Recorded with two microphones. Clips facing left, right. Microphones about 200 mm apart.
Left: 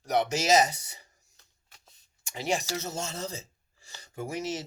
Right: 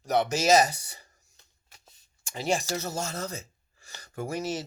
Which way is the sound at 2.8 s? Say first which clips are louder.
Right 2 dB; 25° left (ahead or behind).